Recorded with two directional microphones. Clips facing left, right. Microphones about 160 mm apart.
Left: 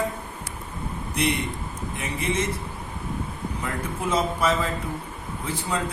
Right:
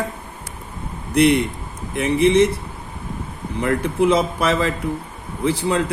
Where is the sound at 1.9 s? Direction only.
85° right.